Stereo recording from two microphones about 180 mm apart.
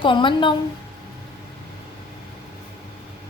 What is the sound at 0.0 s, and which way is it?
Speech, 25° left (ahead or behind).